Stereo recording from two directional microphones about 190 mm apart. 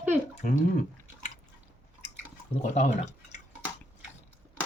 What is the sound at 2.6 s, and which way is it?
Speech, 40° left (ahead or behind).